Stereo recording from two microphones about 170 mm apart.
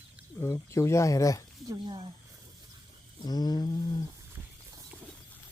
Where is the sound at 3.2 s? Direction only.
25° left (ahead or behind).